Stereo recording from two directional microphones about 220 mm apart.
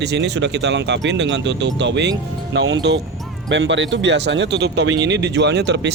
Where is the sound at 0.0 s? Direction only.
50° right (ahead or behind).